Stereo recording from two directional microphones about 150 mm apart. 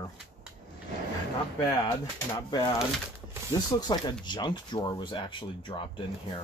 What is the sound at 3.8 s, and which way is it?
Speech, 30° left (ahead or behind).